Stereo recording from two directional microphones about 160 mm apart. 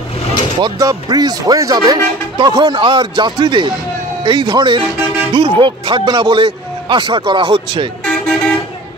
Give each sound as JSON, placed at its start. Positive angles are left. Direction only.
{"t": 0.6, "sound": "speech", "side_deg": -25}
{"t": 8.0, "sound": "vehicle", "side_deg": 5}